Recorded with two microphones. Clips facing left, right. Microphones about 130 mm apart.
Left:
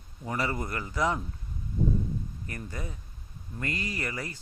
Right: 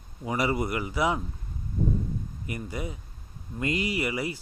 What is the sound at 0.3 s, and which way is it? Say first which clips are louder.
Speech: right 4 dB; 10° right (ahead or behind).